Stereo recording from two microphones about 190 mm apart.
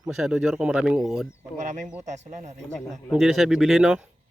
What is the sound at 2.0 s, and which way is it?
Speech, 40° right (ahead or behind).